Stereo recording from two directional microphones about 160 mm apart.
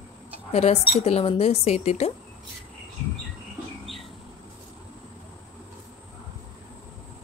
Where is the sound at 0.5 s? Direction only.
45° left (ahead or behind).